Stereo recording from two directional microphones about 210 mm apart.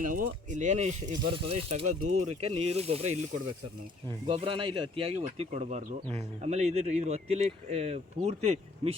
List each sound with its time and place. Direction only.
0.0 s speech: 40° right (ahead or behind)
1.9 s speech: 90° right
2.2 s speech: 30° right (ahead or behind)
4.3 s speech: 25° right (ahead or behind)